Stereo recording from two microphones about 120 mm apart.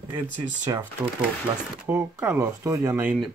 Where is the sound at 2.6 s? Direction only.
30° right (ahead or behind).